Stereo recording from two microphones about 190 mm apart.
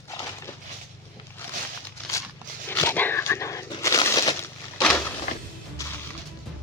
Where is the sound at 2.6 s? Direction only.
10° left (ahead or behind).